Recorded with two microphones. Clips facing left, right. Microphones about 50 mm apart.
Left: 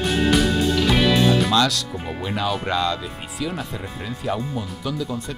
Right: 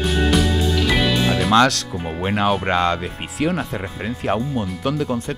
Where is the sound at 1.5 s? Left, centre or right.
Right.